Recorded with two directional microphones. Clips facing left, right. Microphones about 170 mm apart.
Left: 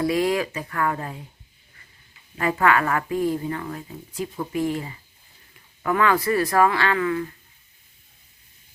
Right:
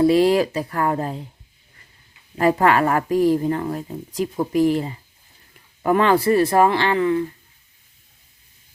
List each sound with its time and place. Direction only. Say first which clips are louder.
0.0 s a woman's voice: right 7 dB; 30° right (ahead or behind)
2.4 s a woman's voice: right 4 dB; 35° right (ahead or behind)